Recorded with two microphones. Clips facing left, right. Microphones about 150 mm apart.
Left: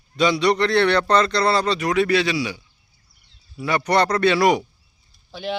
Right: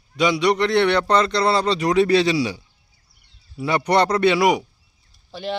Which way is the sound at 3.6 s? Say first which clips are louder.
Right 1 dB; 25° right (ahead or behind).